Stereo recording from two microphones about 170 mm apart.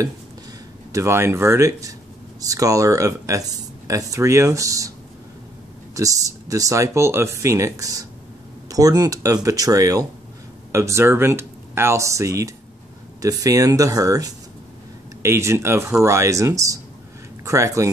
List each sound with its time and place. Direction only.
0.9 s speech: 15° right (ahead or behind)
5.9 s speech: 20° right (ahead or behind)